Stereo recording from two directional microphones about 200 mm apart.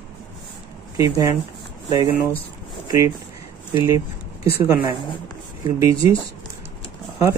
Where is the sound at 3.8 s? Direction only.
15° right (ahead or behind).